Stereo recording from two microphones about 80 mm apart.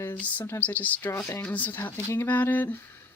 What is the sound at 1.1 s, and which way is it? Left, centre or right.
Speech, left.